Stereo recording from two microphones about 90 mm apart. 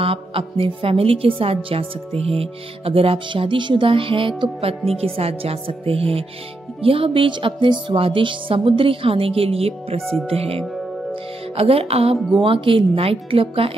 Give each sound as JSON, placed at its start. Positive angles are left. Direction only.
{"t": 0.0, "sound": "a woman's voice", "side_deg": -90}
{"t": 6.8, "sound": "music", "side_deg": -90}
{"t": 10.2, "sound": "a woman's voice", "side_deg": -90}
{"t": 12.4, "sound": "a woman's voice", "side_deg": -75}